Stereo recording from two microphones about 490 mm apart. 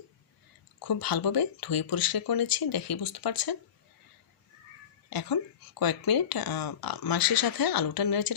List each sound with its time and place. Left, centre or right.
0.8 s speech: left
5.0 s speech: left